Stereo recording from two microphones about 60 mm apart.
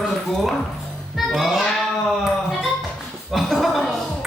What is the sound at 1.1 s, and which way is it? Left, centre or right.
Music, centre.